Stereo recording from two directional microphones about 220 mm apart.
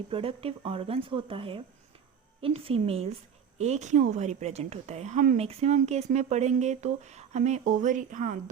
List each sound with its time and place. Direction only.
0.1 s speech: 25° right (ahead or behind)